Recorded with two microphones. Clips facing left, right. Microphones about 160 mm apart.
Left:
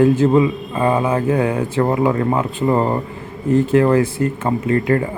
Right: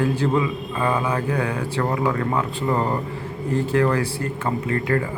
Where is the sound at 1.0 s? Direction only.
25° left (ahead or behind).